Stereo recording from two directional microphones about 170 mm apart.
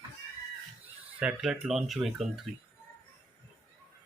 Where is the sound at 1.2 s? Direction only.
10° right (ahead or behind).